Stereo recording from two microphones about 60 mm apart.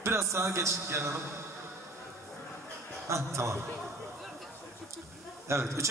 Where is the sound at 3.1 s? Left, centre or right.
Right.